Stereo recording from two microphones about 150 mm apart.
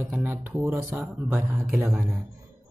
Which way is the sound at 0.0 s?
15° right (ahead or behind).